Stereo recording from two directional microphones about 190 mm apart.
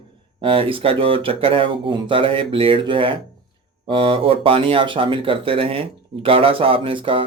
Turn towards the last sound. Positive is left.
turn(degrees=-25)  # may be behind; listen again after turning